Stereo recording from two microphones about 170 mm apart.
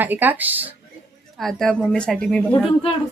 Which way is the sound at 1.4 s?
Centre (ahead or behind).